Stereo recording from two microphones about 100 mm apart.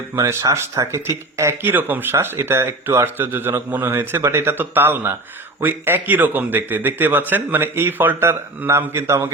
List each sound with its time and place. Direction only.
0.2 s speech: 30° right (ahead or behind)